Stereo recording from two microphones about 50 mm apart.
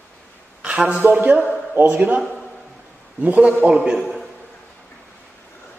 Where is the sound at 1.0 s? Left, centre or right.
Right.